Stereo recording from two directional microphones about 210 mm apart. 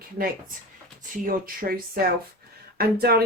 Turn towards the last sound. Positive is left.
turn(degrees=-45)  # may be behind; listen again after turning